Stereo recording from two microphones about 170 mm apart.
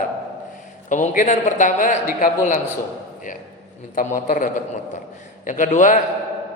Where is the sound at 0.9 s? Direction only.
50° left (ahead or behind).